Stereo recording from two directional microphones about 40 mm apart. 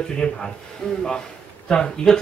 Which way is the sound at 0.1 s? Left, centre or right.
Centre.